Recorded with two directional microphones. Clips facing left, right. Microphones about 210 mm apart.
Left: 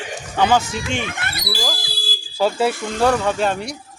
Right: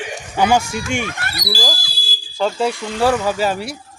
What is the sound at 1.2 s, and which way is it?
Speech, 20° left (ahead or behind).